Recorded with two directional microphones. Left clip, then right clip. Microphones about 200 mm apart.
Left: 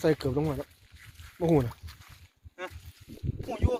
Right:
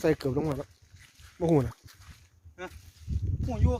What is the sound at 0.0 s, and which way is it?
Speech, 15° right (ahead or behind).